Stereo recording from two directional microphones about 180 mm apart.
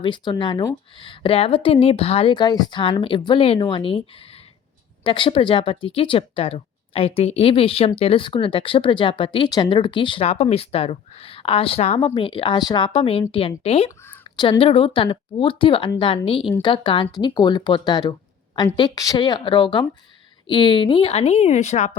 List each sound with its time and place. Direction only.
0.0 s speech: 25° left (ahead or behind)